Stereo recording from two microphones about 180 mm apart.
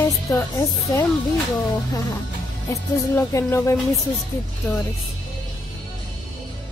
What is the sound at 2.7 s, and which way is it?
Speech, 15° left (ahead or behind).